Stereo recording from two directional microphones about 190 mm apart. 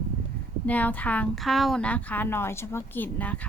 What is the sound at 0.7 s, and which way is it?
A woman's voice, 10° left (ahead or behind).